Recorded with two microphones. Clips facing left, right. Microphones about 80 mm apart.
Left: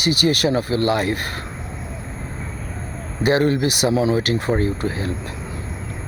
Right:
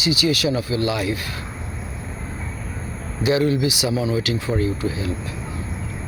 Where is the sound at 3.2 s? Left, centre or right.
Left.